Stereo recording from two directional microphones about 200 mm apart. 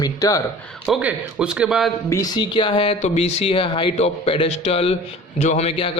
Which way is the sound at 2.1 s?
15° left (ahead or behind).